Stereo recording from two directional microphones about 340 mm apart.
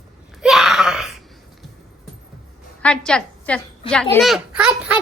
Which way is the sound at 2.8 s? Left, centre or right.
Centre.